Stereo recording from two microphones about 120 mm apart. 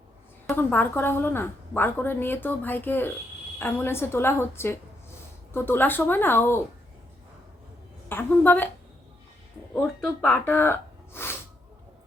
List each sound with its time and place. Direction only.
0.5 s a woman's voice: 15° left (ahead or behind)
8.1 s a woman's voice: 15° left (ahead or behind)
9.8 s speech: centre (ahead or behind)
10.3 s gasp: 15° left (ahead or behind)